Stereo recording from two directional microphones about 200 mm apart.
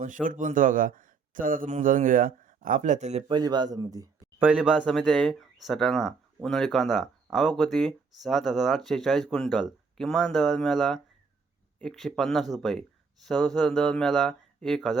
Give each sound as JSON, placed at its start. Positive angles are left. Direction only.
{"t": 0.0, "sound": "speech", "side_deg": -40}